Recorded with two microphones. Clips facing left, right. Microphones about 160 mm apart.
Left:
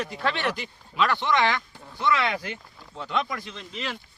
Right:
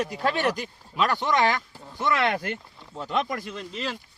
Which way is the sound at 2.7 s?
Centre (ahead or behind).